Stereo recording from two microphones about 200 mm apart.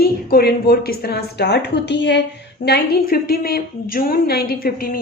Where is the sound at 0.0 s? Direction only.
50° left (ahead or behind).